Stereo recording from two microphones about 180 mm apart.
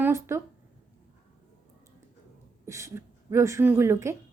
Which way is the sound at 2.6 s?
15° right (ahead or behind).